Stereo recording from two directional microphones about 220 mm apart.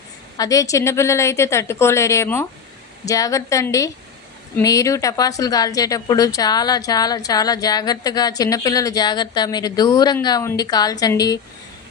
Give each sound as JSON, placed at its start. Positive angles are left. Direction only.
{"t": 0.3, "sound": "a woman's voice", "side_deg": 15}